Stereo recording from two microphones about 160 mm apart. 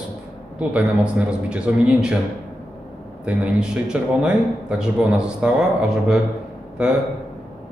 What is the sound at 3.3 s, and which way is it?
A man's voice, 5° right (ahead or behind).